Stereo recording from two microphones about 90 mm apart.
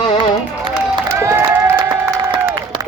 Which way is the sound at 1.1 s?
35° right (ahead or behind).